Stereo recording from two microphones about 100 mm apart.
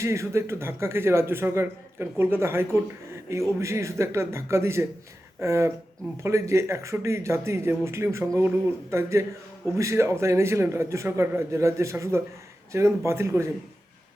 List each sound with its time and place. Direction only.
0.0 s speech: 30° right (ahead or behind)